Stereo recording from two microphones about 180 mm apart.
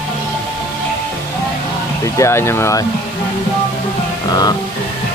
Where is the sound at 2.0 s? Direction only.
15° left (ahead or behind).